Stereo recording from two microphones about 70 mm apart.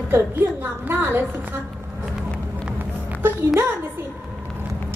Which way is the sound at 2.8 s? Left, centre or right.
Right.